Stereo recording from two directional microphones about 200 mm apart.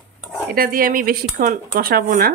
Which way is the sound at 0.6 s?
45° right (ahead or behind).